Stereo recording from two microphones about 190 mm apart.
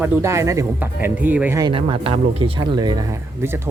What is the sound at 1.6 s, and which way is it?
Speech, 25° right (ahead or behind).